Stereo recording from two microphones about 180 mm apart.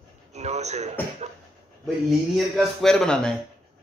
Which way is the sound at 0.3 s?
40° right (ahead or behind).